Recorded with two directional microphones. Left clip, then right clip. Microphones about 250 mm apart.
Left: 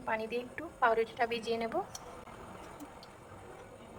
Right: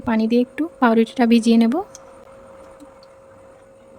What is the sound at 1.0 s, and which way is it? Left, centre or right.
Speech, right.